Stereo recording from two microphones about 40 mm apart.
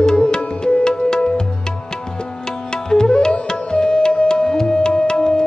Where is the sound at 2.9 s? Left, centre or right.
Centre.